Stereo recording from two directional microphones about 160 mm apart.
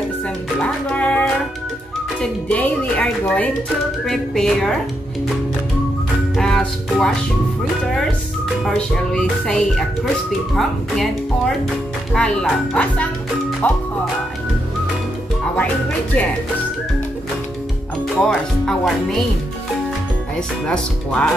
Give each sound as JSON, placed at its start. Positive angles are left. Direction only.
{"t": 0.6, "sound": "music", "side_deg": 10}
{"t": 2.4, "sound": "speech", "side_deg": 10}
{"t": 6.3, "sound": "music", "side_deg": 5}
{"t": 8.6, "sound": "speech", "side_deg": 5}
{"t": 18.1, "sound": "speech", "side_deg": 5}
{"t": 20.3, "sound": "speech", "side_deg": 5}